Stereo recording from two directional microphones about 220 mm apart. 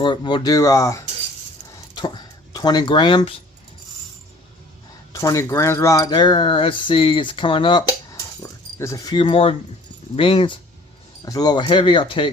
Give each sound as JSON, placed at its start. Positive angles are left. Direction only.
{"t": 0.0, "sound": "speech", "side_deg": 20}
{"t": 5.1, "sound": "speech", "side_deg": 15}